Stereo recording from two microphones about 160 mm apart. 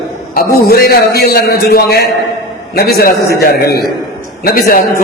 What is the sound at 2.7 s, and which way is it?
A man's voice, 75° left (ahead or behind).